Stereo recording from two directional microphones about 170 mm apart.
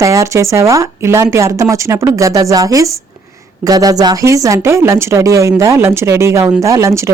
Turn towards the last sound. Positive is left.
turn(degrees=-15)  # may be behind; listen again after turning